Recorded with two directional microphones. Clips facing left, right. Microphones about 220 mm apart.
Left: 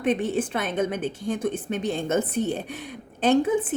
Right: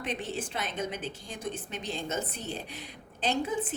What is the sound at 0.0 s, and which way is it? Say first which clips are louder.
A woman's voice: left 11 dB; 55° left (ahead or behind).